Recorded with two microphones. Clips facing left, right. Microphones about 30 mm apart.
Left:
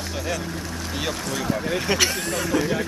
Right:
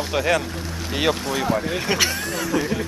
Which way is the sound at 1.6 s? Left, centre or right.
Centre.